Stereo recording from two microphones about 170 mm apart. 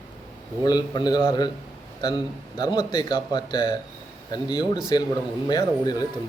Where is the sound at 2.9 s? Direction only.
25° left (ahead or behind).